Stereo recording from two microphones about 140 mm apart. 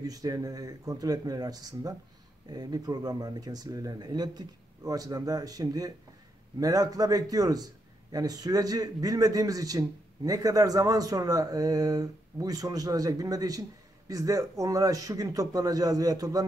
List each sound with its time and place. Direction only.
0.0 s a man's voice: 25° right (ahead or behind)